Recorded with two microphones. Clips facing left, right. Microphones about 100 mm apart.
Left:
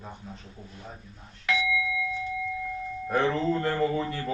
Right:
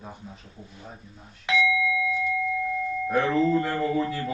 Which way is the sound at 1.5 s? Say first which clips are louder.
Right 4 dB; 20° right (ahead or behind).